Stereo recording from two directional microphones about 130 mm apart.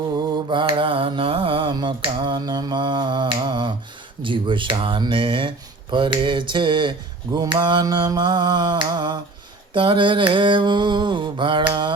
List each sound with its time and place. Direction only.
0.5 s finger snapping: 40° right (ahead or behind)